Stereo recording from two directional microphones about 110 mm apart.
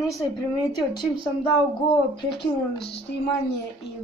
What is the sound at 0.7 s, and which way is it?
Speech, 40° left (ahead or behind).